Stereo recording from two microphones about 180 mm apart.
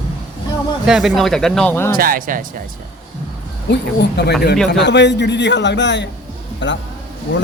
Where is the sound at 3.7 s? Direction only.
65° left (ahead or behind); by 7.5 s 90° left.